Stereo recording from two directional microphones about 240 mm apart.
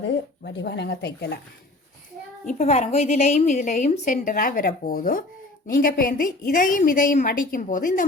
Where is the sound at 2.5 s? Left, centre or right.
Left.